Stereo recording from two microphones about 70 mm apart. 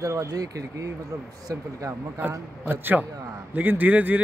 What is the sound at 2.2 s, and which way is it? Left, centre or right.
Speech, right.